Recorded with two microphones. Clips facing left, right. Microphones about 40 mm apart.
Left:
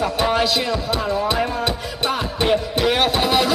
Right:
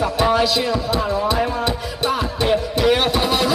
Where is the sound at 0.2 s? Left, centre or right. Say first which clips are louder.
Right 3 dB; centre.